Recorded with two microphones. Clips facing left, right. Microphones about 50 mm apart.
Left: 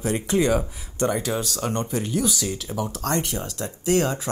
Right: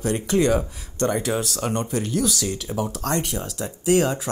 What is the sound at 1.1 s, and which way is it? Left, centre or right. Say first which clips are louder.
Speech: right 2 dB; centre.